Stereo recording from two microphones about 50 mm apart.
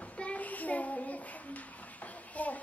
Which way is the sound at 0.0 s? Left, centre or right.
Left.